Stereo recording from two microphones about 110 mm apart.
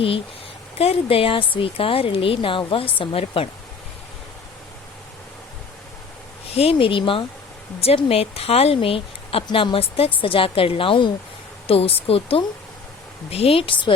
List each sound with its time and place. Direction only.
0.8 s speech: 60° left (ahead or behind)
6.5 s a woman's voice: 65° left (ahead or behind)